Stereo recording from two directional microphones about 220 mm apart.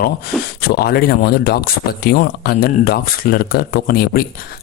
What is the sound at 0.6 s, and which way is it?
Speech, 45° left (ahead or behind).